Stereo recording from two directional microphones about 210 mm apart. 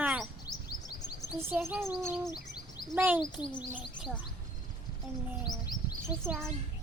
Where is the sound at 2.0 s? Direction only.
10° right (ahead or behind).